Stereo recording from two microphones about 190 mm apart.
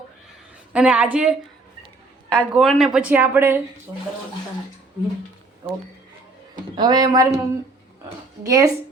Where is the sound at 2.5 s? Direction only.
Centre (ahead or behind).